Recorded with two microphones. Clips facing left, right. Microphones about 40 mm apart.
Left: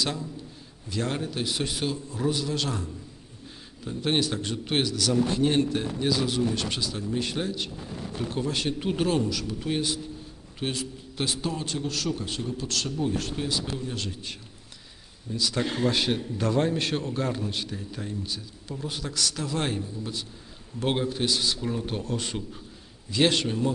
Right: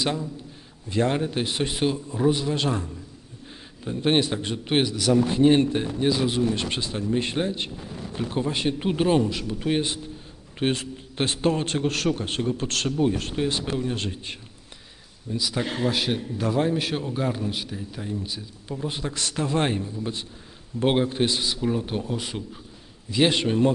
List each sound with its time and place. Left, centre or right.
0.0 s a man's voice: right
15.3 s a man's voice: centre
18.9 s a man's voice: right; by 23.4 s centre